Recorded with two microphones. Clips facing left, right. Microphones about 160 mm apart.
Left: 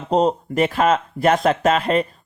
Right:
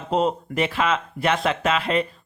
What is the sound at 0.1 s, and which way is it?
Speech, 40° left (ahead or behind).